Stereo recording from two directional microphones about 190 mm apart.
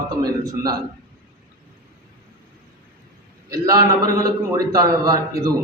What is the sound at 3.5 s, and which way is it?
A man's voice, 20° right (ahead or behind).